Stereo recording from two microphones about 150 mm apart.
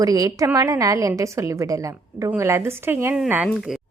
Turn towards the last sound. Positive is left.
turn(degrees=0)  # may be behind; listen again after turning